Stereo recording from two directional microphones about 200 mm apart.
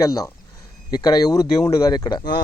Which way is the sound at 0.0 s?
20° left (ahead or behind).